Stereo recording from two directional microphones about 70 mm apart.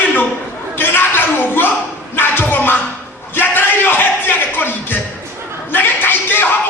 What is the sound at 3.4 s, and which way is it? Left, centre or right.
Music, left.